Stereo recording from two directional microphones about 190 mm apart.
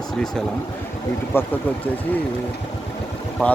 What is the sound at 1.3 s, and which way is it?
Speech, 10° left (ahead or behind).